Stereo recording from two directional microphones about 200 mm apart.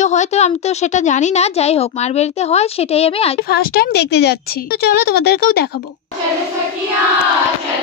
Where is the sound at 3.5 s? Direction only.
50° left (ahead or behind).